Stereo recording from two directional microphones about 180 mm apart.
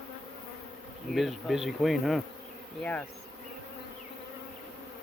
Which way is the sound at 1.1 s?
Centre (ahead or behind).